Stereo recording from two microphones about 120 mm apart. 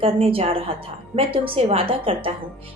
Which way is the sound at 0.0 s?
50° right (ahead or behind).